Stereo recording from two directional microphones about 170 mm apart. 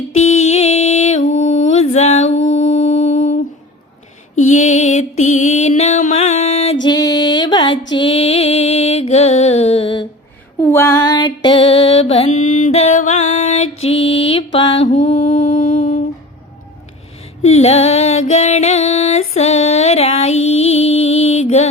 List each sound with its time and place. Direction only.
0.3 s music: 40° left (ahead or behind)
4.4 s music: 45° left (ahead or behind)
6.8 s music: 25° left (ahead or behind)
10.6 s music: 15° left (ahead or behind); by 13.9 s 40° left (ahead or behind)
14.2 s mantra: 35° left (ahead or behind)
14.8 s music: 40° left (ahead or behind)
17.4 s music: 40° left (ahead or behind)